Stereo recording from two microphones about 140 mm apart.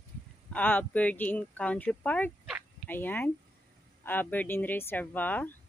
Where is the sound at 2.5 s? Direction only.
5° right (ahead or behind).